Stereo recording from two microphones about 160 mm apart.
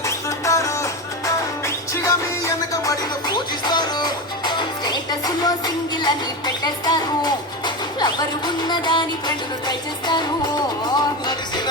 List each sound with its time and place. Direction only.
0.0 s music: 20° left (ahead or behind)